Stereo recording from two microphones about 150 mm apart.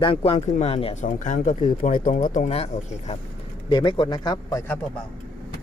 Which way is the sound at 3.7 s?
35° left (ahead or behind).